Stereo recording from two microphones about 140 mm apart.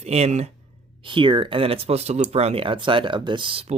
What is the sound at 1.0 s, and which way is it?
Speech, 35° right (ahead or behind).